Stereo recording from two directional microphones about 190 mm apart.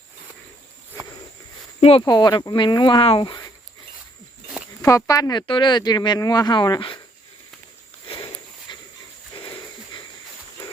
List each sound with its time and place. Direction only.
1.8 s speech: 30° left (ahead or behind)
4.8 s speech: 15° left (ahead or behind)
8.7 s dog: 25° left (ahead or behind)